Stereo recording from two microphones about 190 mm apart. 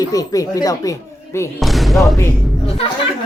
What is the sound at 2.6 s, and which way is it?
Speech, 30° left (ahead or behind).